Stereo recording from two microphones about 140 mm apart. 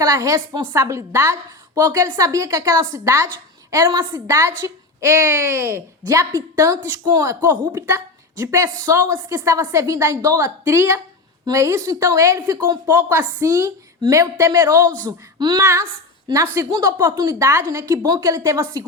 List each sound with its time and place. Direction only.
0.0 s a woman's voice: 20° right (ahead or behind)
16.7 s a woman's voice: 20° right (ahead or behind)